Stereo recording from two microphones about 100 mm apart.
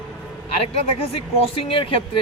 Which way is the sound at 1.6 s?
65° left (ahead or behind).